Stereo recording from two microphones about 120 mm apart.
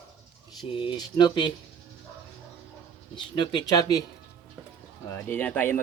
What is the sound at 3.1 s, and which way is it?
Speech, 40° left (ahead or behind).